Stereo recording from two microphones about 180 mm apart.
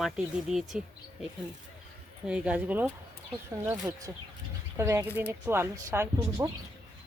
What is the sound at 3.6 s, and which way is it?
Speech, 20° right (ahead or behind).